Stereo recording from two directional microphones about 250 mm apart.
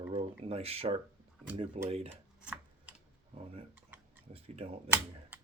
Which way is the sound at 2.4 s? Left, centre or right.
Centre.